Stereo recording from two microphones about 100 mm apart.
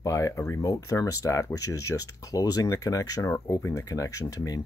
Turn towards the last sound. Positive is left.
turn(degrees=35)  # may be behind; listen again after turning